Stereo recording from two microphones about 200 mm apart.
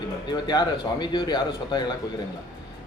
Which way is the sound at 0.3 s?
20° left (ahead or behind).